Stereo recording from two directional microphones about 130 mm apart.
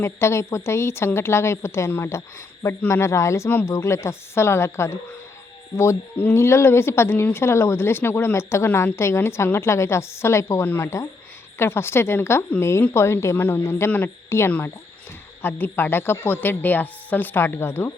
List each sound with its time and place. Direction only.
0.0 s a woman's voice: 20° left (ahead or behind)